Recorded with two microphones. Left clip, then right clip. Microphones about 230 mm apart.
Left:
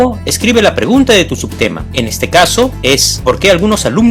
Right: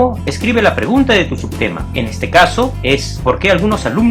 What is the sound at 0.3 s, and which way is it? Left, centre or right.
Speech, left.